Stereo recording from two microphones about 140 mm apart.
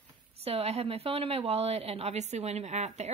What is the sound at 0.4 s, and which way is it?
A woman's voice, 45° right (ahead or behind).